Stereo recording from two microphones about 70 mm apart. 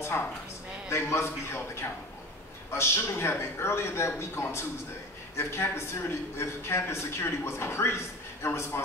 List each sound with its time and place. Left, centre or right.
0.8 s a man's voice: left